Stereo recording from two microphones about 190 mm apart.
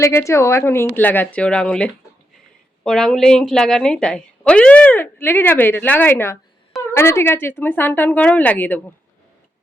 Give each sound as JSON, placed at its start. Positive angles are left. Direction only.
{"t": 0.0, "sound": "a woman's voice", "side_deg": 15}